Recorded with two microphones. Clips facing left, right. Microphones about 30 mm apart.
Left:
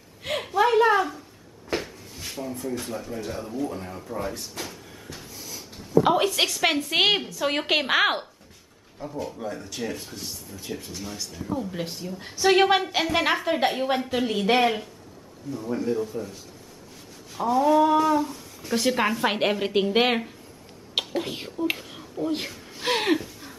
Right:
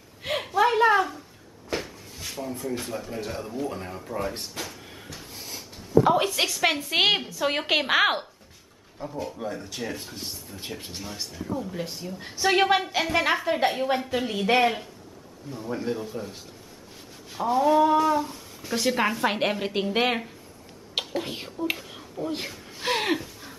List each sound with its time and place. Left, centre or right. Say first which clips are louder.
0.2 s a sound: even; centre
2.8 s a woman's voice: even; centre
5.3 s a sound: right 2 dB; right
6.1 s a woman's voice: left 1 dB; centre
11.3 s a woman's voice: left 2 dB; centre
15.5 s speech: left 5 dB; right
15.8 s speech: left 4 dB; centre
17.4 s a woman's voice: left 1 dB; centre